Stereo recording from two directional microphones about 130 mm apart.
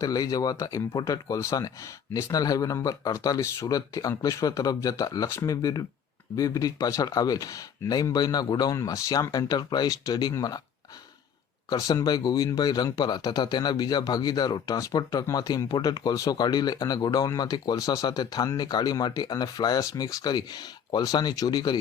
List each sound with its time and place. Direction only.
0.0 s speech: 30° left (ahead or behind)
11.7 s speech: 30° left (ahead or behind)